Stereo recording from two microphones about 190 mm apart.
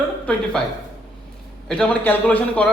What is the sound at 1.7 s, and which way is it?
A man's voice, 5° left (ahead or behind).